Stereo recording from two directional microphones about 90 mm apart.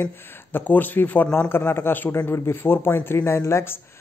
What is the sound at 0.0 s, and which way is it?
Speech, 20° left (ahead or behind).